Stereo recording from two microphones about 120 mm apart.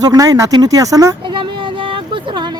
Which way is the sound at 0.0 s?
30° right (ahead or behind).